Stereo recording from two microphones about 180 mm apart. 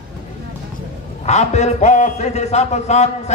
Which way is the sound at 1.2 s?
40° left (ahead or behind).